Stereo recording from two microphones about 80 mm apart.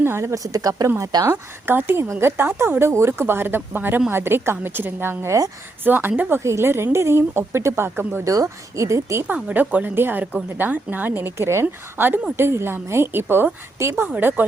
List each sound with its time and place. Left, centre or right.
0.0 s a woman's voice: right
1.2 s speech: right
6.4 s speech: right
8.2 s speech: right
9.2 s speech: centre